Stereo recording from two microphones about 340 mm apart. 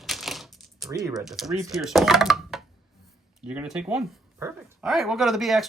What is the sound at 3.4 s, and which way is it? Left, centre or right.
Speech, centre.